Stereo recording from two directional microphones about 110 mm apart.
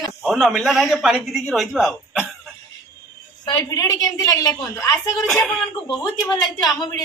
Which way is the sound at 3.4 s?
40° left (ahead or behind).